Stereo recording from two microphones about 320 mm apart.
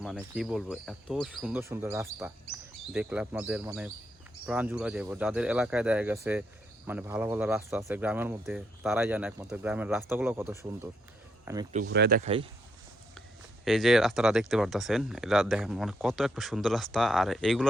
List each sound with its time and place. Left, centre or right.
0.0 s speech: centre
11.9 s speech: right
13.7 s speech: centre